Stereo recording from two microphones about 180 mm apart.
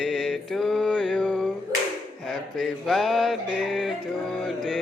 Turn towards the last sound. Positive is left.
turn(degrees=0)  # may be behind; listen again after turning